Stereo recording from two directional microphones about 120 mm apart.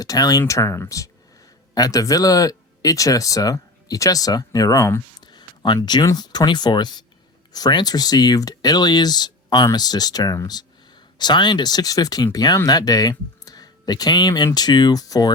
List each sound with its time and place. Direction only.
0.0 s speech: 30° left (ahead or behind)